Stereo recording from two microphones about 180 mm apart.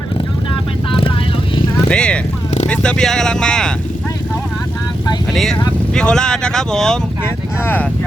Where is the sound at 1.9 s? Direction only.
5° left (ahead or behind).